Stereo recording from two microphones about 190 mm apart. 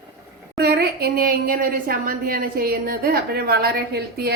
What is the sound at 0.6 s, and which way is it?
A woman's voice, 55° right (ahead or behind).